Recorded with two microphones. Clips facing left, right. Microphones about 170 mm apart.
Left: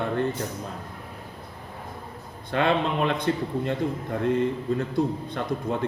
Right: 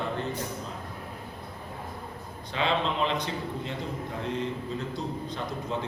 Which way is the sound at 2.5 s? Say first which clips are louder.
Left 5 dB; 55° left (ahead or behind).